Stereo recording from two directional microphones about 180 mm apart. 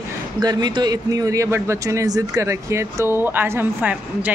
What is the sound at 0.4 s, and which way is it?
A man's voice, 20° right (ahead or behind).